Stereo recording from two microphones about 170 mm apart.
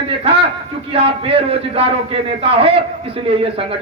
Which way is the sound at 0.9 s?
35° right (ahead or behind).